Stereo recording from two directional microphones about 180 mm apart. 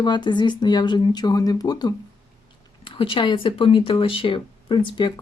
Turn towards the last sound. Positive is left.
turn(degrees=25)  # may be behind; listen again after turning